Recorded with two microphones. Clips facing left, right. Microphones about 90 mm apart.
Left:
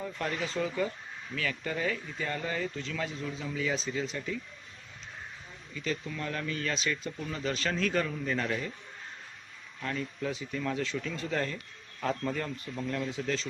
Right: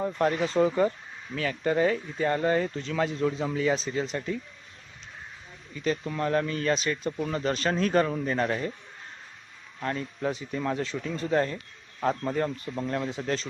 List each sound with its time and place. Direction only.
0.0 s a man's voice: 40° right (ahead or behind)
5.7 s a man's voice: 40° right (ahead or behind)
9.8 s a man's voice: 35° right (ahead or behind)
13.1 s speech: 45° right (ahead or behind)